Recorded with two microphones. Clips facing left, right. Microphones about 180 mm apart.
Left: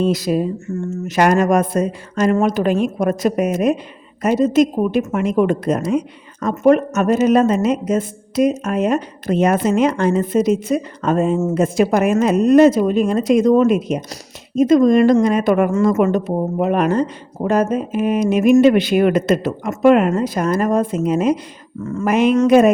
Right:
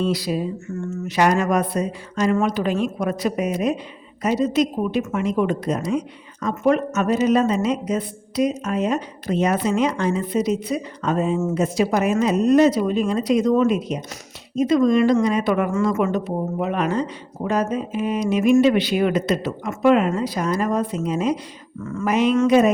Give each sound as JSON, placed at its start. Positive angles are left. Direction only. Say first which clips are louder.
{"t": 0.1, "sound": "a woman's voice", "louder": "left 5 dB", "side_deg": 50}